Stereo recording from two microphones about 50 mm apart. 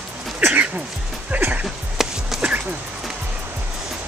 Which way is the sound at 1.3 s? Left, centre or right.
Right.